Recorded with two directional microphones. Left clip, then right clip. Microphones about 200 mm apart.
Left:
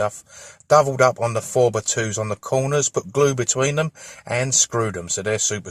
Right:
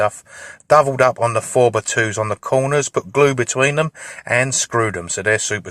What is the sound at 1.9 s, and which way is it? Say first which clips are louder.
Speech: right 6 dB; 30° right (ahead or behind).